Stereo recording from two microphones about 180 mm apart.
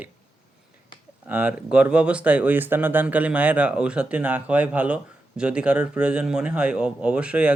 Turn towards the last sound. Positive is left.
turn(degrees=-5)  # may be behind; listen again after turning